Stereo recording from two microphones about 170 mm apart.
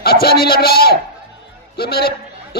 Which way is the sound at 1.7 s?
70° left (ahead or behind).